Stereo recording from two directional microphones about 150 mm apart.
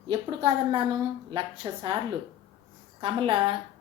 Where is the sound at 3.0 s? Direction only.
35° right (ahead or behind).